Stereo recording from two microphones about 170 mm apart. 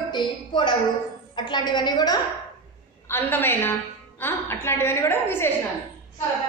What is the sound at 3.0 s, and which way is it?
A woman's voice, 15° left (ahead or behind).